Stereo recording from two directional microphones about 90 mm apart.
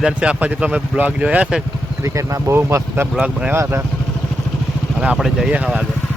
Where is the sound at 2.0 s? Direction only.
35° right (ahead or behind).